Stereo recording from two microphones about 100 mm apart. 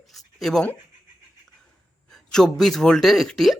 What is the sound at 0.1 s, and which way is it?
Writing, centre (ahead or behind).